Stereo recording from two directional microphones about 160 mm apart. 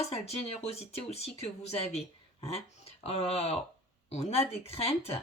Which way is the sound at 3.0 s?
40° left (ahead or behind).